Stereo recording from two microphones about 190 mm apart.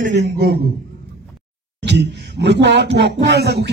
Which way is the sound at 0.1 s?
65° right (ahead or behind).